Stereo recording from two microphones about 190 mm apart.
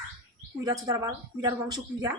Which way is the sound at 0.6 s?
20° right (ahead or behind).